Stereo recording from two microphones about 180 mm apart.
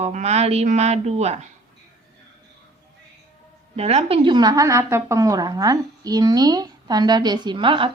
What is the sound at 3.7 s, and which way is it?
A woman's voice, 35° right (ahead or behind).